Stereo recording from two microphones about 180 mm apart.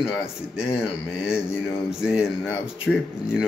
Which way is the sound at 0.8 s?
5° right (ahead or behind).